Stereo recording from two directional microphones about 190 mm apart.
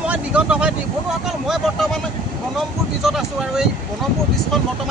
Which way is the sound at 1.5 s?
Centre (ahead or behind).